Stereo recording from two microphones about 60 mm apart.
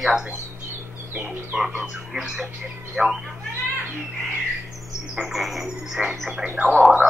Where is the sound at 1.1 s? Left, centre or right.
Right.